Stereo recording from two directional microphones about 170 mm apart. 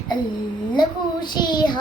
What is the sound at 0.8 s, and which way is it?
Speech, 25° left (ahead or behind).